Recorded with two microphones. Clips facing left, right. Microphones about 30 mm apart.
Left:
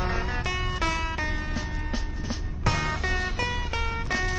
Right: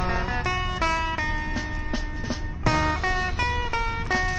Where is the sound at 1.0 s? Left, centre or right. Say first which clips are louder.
Right 3 dB; centre.